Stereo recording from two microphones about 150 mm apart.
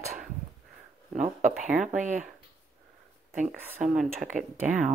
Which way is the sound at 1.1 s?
55° right (ahead or behind).